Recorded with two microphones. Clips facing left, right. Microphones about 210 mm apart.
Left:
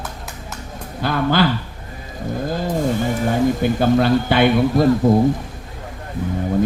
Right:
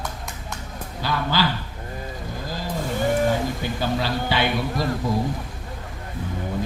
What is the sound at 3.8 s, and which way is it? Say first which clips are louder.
Speech: left 9 dB; 55° left (ahead or behind).